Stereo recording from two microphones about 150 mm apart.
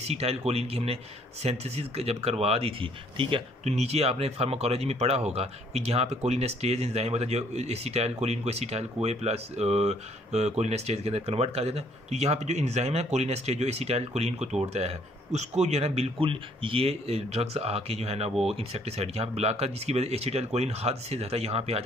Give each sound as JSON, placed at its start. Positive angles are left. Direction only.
{"t": 0.0, "sound": "speech", "side_deg": -45}
{"t": 3.6, "sound": "speech", "side_deg": -45}